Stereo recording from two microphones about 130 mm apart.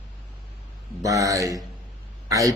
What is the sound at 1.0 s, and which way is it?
A man's voice, 25° right (ahead or behind).